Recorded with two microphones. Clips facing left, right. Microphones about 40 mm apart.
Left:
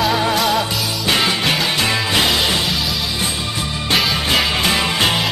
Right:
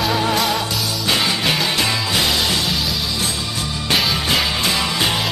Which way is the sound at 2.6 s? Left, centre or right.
Centre.